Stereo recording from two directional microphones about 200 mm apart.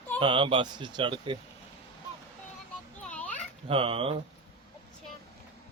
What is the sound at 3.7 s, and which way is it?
Speech, 25° right (ahead or behind).